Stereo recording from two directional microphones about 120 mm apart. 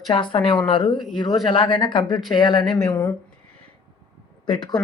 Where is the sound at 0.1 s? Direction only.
45° left (ahead or behind).